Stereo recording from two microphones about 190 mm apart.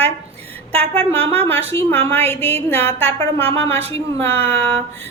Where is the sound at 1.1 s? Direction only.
30° right (ahead or behind).